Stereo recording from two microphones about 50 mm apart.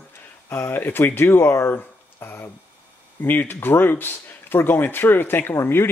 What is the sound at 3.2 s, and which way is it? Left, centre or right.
Speech, left.